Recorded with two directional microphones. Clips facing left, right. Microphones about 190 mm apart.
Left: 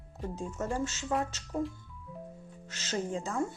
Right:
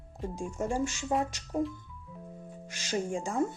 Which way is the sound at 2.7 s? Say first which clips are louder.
Right 2 dB; 10° right (ahead or behind).